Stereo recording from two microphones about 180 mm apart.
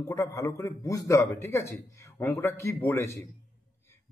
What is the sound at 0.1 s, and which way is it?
Speech, 15° left (ahead or behind).